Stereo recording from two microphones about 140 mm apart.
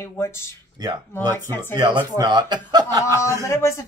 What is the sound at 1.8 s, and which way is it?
Speech, 30° right (ahead or behind).